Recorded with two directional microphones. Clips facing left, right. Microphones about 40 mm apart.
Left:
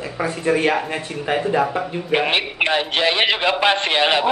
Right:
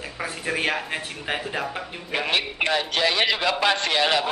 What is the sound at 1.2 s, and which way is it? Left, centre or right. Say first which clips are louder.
Speech: left 11 dB; centre.